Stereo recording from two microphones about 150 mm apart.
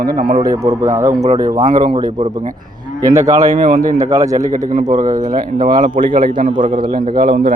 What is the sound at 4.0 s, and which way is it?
Speech, 20° right (ahead or behind).